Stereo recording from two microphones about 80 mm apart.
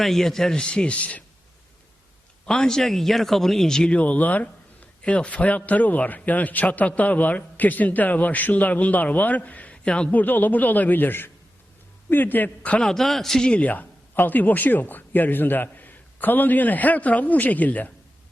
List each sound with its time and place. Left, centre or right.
0.0 s speech: centre
2.5 s a man's voice: centre
12.9 s a man's voice: centre